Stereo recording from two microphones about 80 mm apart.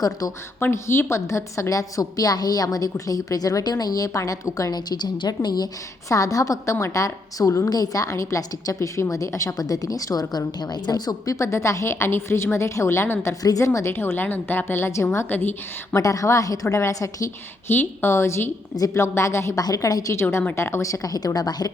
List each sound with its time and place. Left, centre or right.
0.0 s a woman's voice: left
0.6 s a woman's voice: left
6.1 s a woman's voice: left
9.6 s a woman's voice: left
13.4 s a woman's voice: left
13.9 s a woman's voice: left
16.0 s a woman's voice: left
17.7 s a woman's voice: left
19.6 s a woman's voice: left
20.6 s a woman's voice: left